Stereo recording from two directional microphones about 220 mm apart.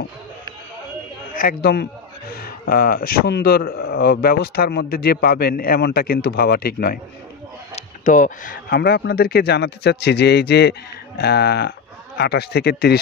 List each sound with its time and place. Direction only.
1.3 s a man's voice: 40° left (ahead or behind)